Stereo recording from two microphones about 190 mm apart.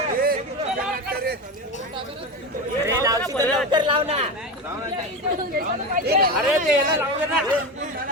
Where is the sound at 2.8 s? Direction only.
15° right (ahead or behind).